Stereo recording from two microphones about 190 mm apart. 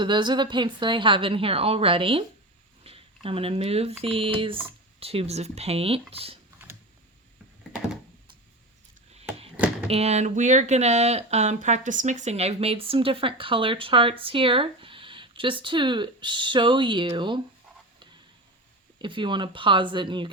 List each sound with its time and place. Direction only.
0.0 s speech: 25° right (ahead or behind)
9.8 s speech: 35° right (ahead or behind)
19.0 s speech: 25° right (ahead or behind)